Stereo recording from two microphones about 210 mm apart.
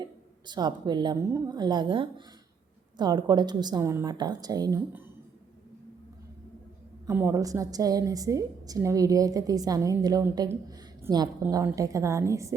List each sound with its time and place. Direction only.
0.0 s a woman's voice: 20° right (ahead or behind)
7.1 s a woman's voice: 10° right (ahead or behind)